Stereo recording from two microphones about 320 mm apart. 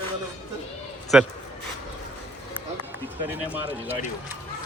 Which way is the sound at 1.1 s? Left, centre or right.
Centre.